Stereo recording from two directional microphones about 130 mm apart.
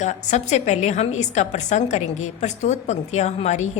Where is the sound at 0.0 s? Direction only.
65° left (ahead or behind).